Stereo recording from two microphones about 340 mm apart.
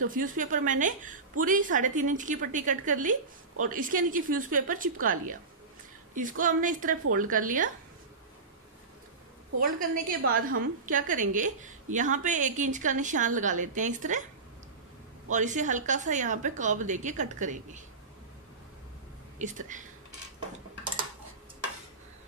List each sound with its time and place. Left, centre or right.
0.1 s a woman's voice: right
9.6 s a woman's voice: right
15.2 s a woman's voice: right
19.3 s a woman's voice: right